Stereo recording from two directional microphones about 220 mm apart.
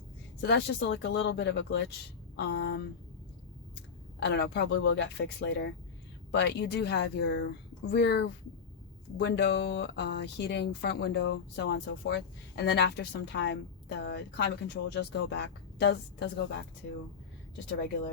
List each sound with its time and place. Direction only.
0.4 s a woman's voice: 50° left (ahead or behind)
4.2 s a woman's voice: 50° left (ahead or behind)
17.7 s a woman's voice: 50° left (ahead or behind)